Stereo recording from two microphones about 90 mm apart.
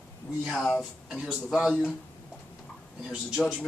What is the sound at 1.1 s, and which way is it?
Speech, centre (ahead or behind).